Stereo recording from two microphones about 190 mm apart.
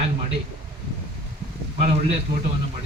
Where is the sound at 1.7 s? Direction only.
35° right (ahead or behind).